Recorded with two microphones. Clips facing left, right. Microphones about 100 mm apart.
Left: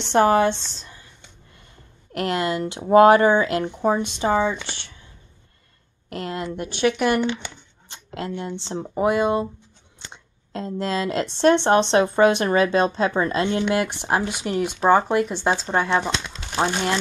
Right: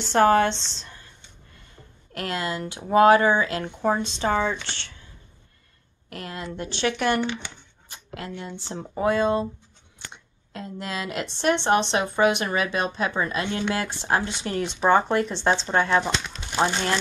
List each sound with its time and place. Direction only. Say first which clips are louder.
0.0 s speech: left 1 dB; 20° left (ahead or behind)
2.1 s speech: left 5 dB; 20° left (ahead or behind)
6.0 s speech: left 6 dB; 25° left (ahead or behind)
7.9 s speech: left 5 dB; 25° left (ahead or behind)
8.9 s speech: left 2 dB; 15° left (ahead or behind)
9.9 s a sound: even; 30° left (ahead or behind)
11.3 s speech: left 5 dB; 30° left (ahead or behind)
13.7 s speech: left 3 dB; 20° left (ahead or behind)